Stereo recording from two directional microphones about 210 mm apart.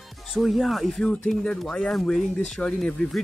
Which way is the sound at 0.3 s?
Centre (ahead or behind).